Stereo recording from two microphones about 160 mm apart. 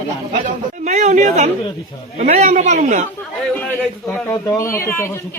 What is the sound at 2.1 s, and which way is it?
Speech, 45° right (ahead or behind).